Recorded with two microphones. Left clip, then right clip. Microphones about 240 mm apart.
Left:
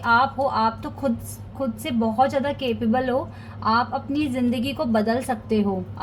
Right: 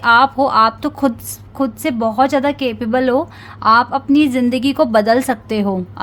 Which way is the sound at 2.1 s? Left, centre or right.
Right.